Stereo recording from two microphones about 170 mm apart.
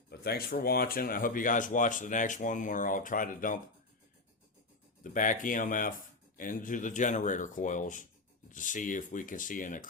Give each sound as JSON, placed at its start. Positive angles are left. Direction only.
{"t": 0.1, "sound": "speech", "side_deg": 65}
{"t": 5.0, "sound": "speech", "side_deg": 50}